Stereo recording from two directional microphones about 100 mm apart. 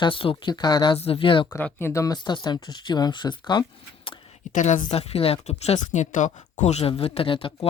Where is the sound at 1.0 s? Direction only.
70° left (ahead or behind).